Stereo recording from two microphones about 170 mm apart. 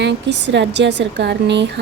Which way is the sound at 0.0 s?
90° right.